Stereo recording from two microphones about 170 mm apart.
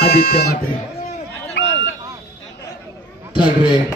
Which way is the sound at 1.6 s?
90° left.